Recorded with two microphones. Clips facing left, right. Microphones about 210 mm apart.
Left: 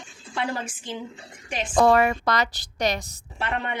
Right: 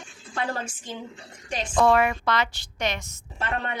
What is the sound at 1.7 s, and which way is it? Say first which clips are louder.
A woman's voice: left 2 dB; 40° left (ahead or behind).